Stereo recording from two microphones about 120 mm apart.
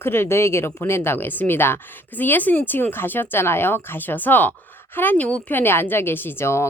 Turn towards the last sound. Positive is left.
turn(degrees=20)  # may be behind; listen again after turning